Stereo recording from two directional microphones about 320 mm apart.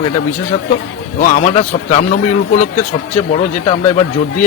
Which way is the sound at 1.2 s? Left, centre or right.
Left.